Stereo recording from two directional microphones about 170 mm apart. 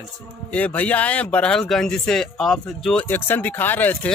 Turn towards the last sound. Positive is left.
turn(degrees=10)  # may be behind; listen again after turning